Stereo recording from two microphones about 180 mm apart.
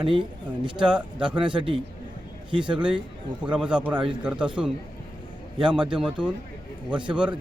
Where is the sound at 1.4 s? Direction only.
25° right (ahead or behind).